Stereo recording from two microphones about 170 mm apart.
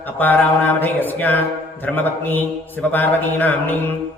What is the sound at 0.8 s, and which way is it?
Speech, 10° left (ahead or behind).